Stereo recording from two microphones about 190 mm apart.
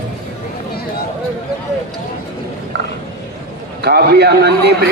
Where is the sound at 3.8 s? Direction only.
60° right (ahead or behind).